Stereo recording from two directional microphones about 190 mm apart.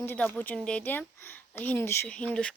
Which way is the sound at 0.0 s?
10° left (ahead or behind).